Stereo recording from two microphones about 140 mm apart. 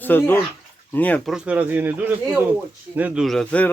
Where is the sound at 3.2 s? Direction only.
5° left (ahead or behind).